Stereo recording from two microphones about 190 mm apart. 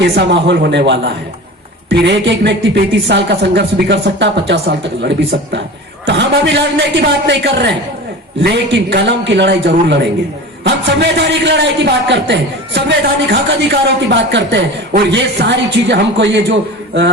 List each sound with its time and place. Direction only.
0.0 s a man's voice: 65° right (ahead or behind)